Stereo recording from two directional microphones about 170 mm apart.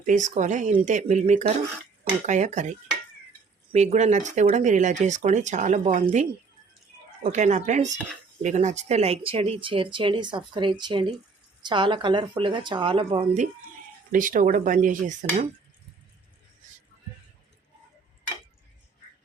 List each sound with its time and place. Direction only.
0.0 s speech: 45° right (ahead or behind); by 13.2 s 30° right (ahead or behind)
14.1 s speech: 50° right (ahead or behind)